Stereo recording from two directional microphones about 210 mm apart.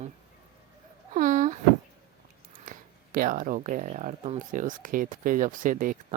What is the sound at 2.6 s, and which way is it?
Speech, 40° right (ahead or behind).